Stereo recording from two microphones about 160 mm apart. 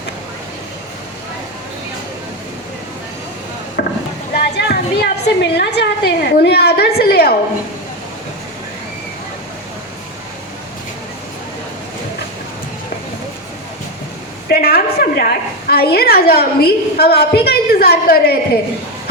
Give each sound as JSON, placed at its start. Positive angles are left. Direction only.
{"t": 3.8, "sound": "a sound", "side_deg": 90}
{"t": 4.5, "sound": "a woman's voice", "side_deg": 90}
{"t": 14.4, "sound": "a woman's voice", "side_deg": 75}